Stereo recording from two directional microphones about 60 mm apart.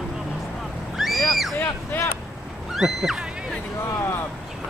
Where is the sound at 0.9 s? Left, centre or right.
Centre.